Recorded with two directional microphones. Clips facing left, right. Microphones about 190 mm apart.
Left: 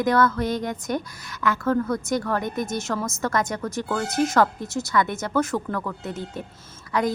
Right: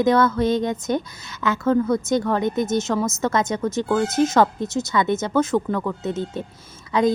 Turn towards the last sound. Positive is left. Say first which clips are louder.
# right 5 dB
turn(degrees=-20)  # may be behind; listen again after turning